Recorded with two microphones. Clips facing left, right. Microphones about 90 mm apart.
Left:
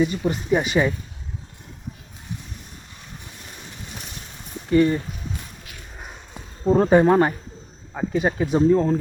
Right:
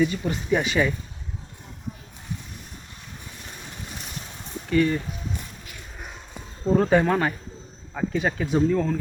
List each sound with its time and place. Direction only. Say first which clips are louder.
0.2 s speech: left 3 dB; 15° left (ahead or behind)
4.7 s speech: left 4 dB; 30° left (ahead or behind)
6.7 s speech: left 4 dB; 25° left (ahead or behind)